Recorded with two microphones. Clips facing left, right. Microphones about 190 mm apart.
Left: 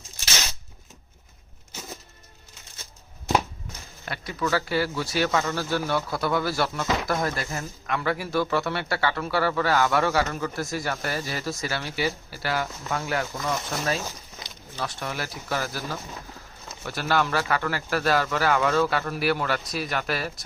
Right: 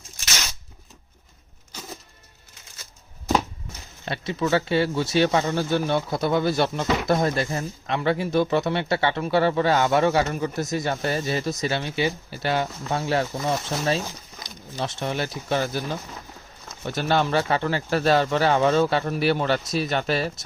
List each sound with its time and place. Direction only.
4.0 s speech: 25° right (ahead or behind)